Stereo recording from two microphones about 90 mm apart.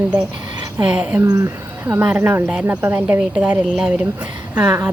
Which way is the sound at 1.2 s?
35° right (ahead or behind).